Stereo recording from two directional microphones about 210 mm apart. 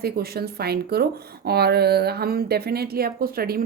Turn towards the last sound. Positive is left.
turn(degrees=-45)  # may be behind; listen again after turning